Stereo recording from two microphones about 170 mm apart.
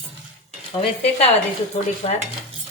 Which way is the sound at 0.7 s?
35° left (ahead or behind).